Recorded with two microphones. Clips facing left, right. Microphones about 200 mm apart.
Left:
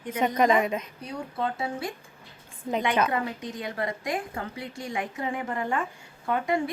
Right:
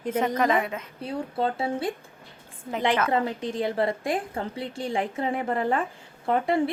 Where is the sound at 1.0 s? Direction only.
30° right (ahead or behind).